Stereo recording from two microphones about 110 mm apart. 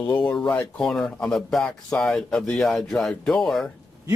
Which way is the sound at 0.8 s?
5° left (ahead or behind).